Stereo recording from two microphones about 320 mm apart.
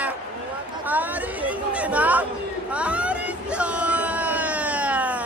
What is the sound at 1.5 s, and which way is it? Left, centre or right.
Chatter, centre.